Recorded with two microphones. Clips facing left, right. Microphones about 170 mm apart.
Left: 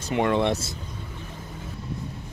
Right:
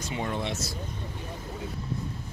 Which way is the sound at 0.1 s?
70° left (ahead or behind).